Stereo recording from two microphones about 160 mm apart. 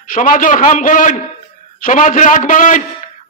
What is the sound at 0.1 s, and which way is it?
A man's voice, 55° left (ahead or behind).